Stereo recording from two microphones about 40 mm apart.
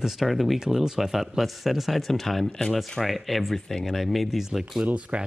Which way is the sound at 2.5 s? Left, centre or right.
Centre.